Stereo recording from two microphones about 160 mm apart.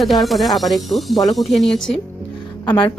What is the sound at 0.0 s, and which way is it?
Speech, centre (ahead or behind).